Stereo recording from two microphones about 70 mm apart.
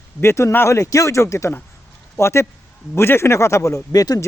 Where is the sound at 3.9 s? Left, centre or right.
Left.